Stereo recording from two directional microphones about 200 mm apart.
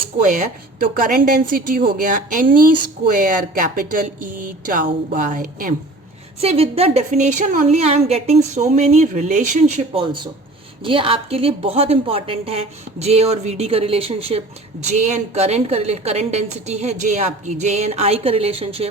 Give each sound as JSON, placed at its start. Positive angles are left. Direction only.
{"t": 0.2, "sound": "a woman's voice", "side_deg": -40}
{"t": 6.4, "sound": "a woman's voice", "side_deg": -30}